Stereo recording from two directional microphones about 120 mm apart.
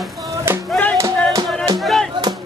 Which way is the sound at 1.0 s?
25° right (ahead or behind).